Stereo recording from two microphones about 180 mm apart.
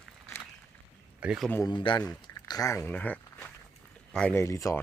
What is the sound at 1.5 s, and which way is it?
Speech, 20° left (ahead or behind).